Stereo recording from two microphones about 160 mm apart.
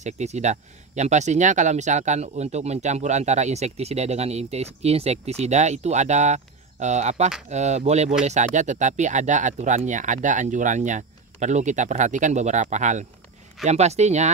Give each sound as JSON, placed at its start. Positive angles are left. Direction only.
{"t": 0.0, "sound": "speech", "side_deg": -45}